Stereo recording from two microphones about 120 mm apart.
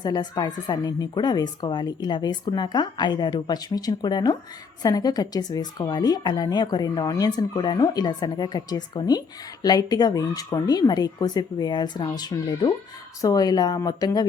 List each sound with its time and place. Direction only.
0.0 s a woman's voice: 35° left (ahead or behind)